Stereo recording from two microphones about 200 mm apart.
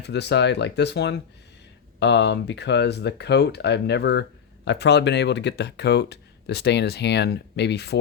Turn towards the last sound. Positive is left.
turn(degrees=55)  # may be behind; listen again after turning